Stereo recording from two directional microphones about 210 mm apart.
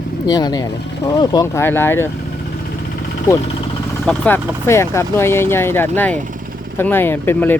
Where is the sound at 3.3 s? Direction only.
15° left (ahead or behind).